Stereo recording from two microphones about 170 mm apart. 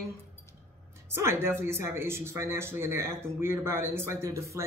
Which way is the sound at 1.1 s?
15° right (ahead or behind).